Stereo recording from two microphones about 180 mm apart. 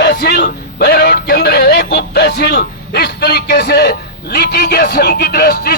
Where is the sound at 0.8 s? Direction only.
65° left (ahead or behind).